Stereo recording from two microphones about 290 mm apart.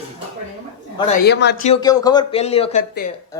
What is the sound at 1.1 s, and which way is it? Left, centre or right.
Speech, left.